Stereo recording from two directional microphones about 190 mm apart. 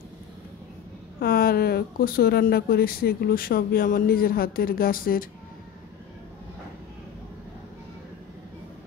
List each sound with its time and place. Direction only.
1.2 s speech: 55° left (ahead or behind)